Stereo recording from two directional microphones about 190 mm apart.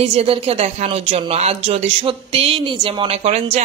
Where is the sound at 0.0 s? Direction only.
30° right (ahead or behind).